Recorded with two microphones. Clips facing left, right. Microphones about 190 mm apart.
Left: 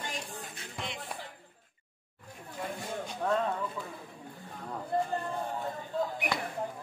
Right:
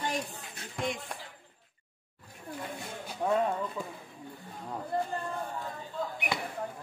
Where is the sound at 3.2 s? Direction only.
15° right (ahead or behind).